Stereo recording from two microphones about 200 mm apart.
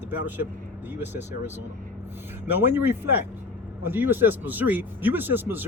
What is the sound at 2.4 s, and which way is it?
Speech, 10° right (ahead or behind).